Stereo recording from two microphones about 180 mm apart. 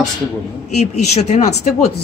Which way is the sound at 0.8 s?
40° left (ahead or behind).